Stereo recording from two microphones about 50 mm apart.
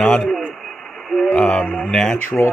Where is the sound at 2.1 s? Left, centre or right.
Left.